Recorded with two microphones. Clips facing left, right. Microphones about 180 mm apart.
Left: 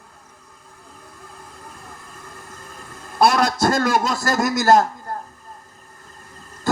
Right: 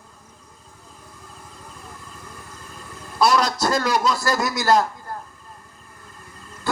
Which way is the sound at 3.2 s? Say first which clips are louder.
Left 2 dB; 50° left (ahead or behind).